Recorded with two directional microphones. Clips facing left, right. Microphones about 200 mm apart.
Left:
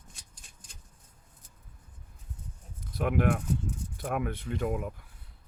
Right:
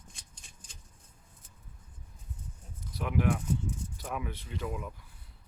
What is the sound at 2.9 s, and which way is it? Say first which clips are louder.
Speech: left 3 dB; 55° left (ahead or behind).